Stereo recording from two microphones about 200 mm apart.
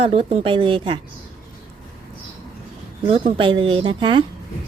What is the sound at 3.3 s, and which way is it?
Speech, 25° right (ahead or behind).